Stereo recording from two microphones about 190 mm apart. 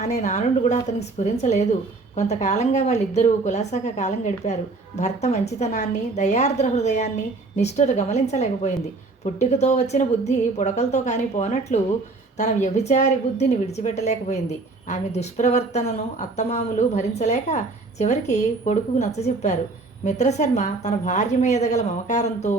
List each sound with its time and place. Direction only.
0.0 s a woman's voice: 35° left (ahead or behind)